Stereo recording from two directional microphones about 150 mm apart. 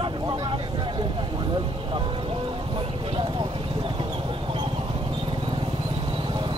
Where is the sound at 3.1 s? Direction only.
35° right (ahead or behind).